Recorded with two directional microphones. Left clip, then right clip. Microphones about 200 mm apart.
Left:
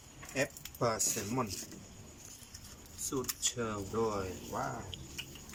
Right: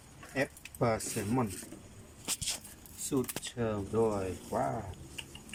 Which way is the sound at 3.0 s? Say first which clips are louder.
Right 1 dB; 15° right (ahead or behind).